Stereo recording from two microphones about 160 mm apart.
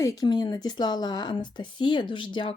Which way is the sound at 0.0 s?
20° left (ahead or behind).